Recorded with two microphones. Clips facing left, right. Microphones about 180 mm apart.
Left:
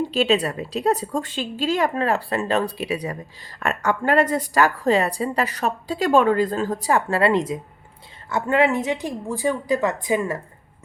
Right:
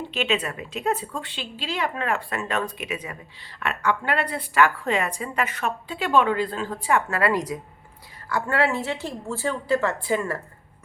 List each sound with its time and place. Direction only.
0.0 s a woman's voice: 35° left (ahead or behind); by 10.4 s 15° left (ahead or behind)